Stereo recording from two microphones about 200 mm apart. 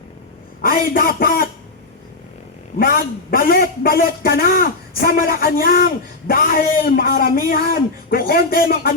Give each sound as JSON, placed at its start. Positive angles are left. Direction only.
{"t": 0.6, "sound": "speech", "side_deg": 45}
{"t": 2.7, "sound": "a man's voice", "side_deg": 45}